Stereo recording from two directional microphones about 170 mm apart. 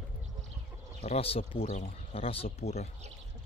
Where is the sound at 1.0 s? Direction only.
35° left (ahead or behind).